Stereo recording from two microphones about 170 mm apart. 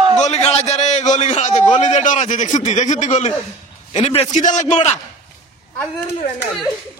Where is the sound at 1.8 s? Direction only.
45° left (ahead or behind).